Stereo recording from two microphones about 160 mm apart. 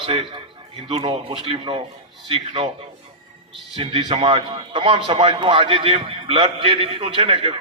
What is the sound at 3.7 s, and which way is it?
A man's voice, 30° right (ahead or behind).